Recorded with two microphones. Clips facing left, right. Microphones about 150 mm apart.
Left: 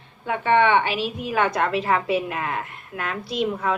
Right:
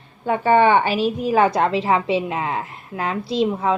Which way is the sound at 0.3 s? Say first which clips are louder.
Right 4 dB; 40° right (ahead or behind).